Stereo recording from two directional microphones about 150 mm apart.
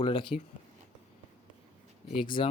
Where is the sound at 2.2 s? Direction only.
30° left (ahead or behind).